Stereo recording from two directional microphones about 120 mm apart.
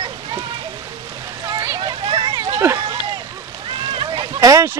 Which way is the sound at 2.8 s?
35° right (ahead or behind).